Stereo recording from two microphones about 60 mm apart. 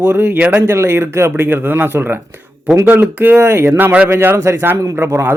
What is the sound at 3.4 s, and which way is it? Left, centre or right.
Speech, right.